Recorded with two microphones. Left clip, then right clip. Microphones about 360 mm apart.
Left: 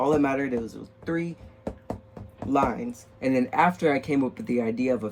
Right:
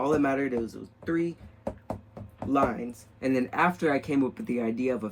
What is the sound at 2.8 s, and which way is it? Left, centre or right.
Speech, centre.